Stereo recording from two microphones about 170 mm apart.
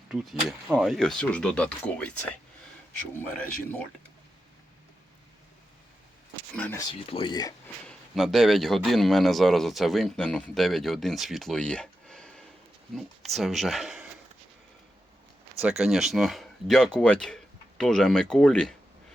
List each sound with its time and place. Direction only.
0.1 s a man's voice: centre (ahead or behind)
6.6 s speech: 15° left (ahead or behind)
7.1 s speech: 30° left (ahead or behind)
7.9 s a man's voice: centre (ahead or behind)
15.8 s a man's voice: centre (ahead or behind)